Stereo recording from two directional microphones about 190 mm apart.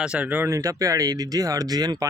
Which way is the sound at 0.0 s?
5° right (ahead or behind).